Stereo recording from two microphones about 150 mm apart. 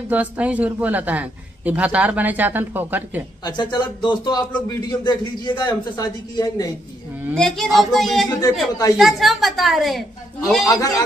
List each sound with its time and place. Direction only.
0.1 s a man's voice: 10° right (ahead or behind)
3.4 s a man's voice: 30° left (ahead or behind)
7.3 s a woman's voice: 5° left (ahead or behind)
8.3 s a man's voice: 25° left (ahead or behind)
8.9 s a woman's voice: centre (ahead or behind)
10.6 s a man's voice: 25° left (ahead or behind)